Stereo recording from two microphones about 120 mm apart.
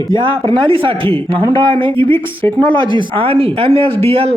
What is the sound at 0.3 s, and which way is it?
Speech, 45° right (ahead or behind).